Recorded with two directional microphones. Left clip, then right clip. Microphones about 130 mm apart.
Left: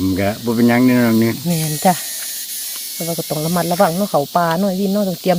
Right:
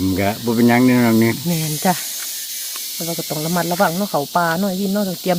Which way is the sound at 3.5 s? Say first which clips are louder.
Left 2 dB; 30° left (ahead or behind).